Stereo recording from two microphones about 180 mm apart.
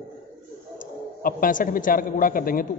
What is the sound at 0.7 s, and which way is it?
A man's voice, 50° left (ahead or behind).